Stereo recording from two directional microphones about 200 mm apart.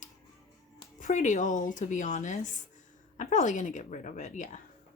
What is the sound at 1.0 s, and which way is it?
Speech, 40° left (ahead or behind).